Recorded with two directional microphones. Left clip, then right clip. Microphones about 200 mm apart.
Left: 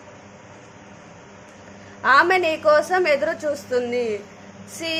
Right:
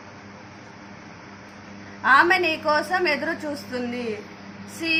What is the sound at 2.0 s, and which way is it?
A woman's voice, 50° left (ahead or behind).